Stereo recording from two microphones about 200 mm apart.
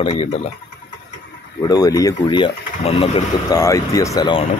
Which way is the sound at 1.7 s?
20° left (ahead or behind).